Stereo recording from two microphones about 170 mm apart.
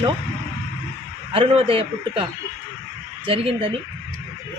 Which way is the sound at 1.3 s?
35° right (ahead or behind).